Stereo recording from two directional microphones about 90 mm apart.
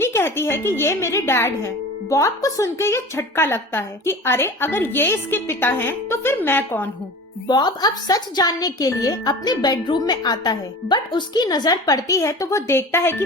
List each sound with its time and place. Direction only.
0.0 s a woman's voice: 25° left (ahead or behind)
7.4 s a woman's voice: 50° left (ahead or behind); by 13.2 s 25° left (ahead or behind)